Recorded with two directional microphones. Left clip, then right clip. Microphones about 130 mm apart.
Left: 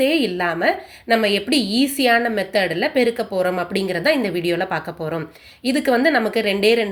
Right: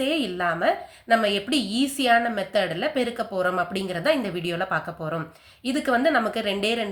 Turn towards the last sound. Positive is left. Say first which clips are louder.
# left 8 dB
turn(degrees=30)  # may be behind; listen again after turning